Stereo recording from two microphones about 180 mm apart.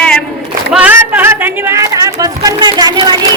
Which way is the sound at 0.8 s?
10° right (ahead or behind).